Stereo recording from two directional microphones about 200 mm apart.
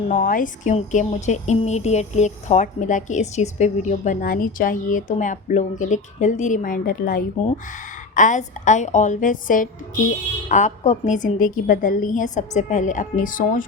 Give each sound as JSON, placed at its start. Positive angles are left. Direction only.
{"t": 0.1, "sound": "speech", "side_deg": 40}